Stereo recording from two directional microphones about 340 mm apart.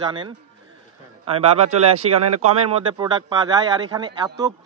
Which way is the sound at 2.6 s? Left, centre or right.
Centre.